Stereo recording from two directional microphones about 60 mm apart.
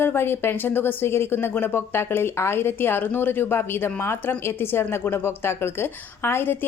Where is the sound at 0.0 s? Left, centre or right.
Left.